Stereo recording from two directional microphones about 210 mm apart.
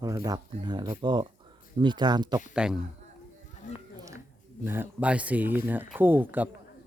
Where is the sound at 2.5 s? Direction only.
5° right (ahead or behind).